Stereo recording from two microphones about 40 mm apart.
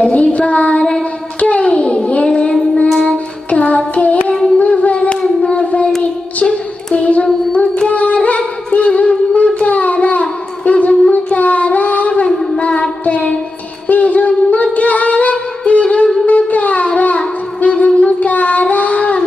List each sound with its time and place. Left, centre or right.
0.1 s child singing: left
3.4 s music: left
4.6 s a sound: left
5.4 s child singing: left
6.4 s a sound: left
7.9 s carnatic music: left
8.7 s music: left
9.3 s a sound: left
11.1 s child singing: left
13.8 s singing: left
16.3 s a sound: left
17.6 s child singing: left